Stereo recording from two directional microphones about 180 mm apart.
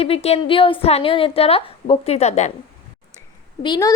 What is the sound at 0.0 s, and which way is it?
A woman's voice, 35° left (ahead or behind).